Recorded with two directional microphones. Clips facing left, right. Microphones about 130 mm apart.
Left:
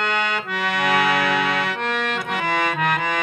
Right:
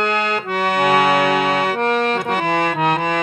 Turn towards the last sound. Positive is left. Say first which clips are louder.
# right 4 dB
turn(degrees=-30)  # may be behind; listen again after turning